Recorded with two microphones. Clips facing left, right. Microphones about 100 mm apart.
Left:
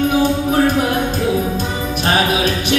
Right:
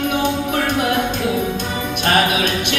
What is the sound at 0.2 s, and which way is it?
Music, 40° left (ahead or behind).